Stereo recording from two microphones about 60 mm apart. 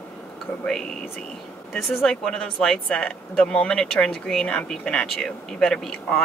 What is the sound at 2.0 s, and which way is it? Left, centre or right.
Speech, centre.